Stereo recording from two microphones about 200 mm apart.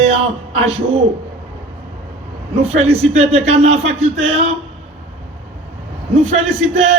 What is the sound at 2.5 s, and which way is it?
A man's voice, 30° right (ahead or behind).